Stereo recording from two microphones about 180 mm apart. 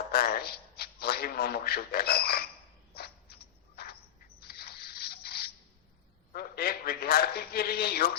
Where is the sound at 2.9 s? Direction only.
60° left (ahead or behind).